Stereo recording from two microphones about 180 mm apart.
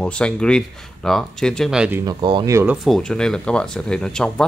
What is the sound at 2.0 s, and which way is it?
Speech, 25° right (ahead or behind).